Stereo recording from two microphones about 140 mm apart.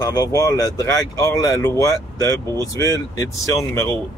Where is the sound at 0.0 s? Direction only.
25° left (ahead or behind).